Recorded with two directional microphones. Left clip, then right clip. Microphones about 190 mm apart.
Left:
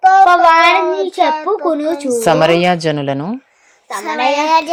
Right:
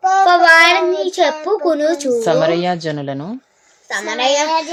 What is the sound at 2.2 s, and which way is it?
Speech, 15° left (ahead or behind).